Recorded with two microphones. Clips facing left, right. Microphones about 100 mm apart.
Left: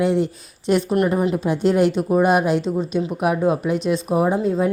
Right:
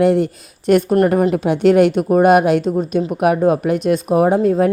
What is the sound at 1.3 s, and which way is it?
Speech, 65° right (ahead or behind).